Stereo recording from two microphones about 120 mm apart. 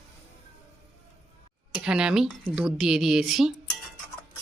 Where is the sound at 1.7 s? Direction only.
5° right (ahead or behind).